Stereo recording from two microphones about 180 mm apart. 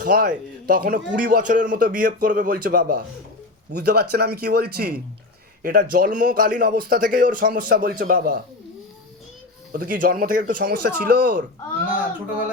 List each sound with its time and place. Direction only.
0.0 s a man's voice: 50° right (ahead or behind)
3.7 s a man's voice: 65° right (ahead or behind)
9.7 s a man's voice: 50° right (ahead or behind)